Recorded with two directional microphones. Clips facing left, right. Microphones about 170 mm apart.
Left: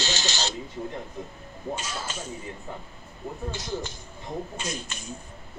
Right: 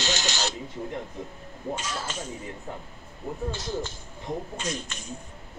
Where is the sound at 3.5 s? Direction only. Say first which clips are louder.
Right 1 dB; 15° left (ahead or behind).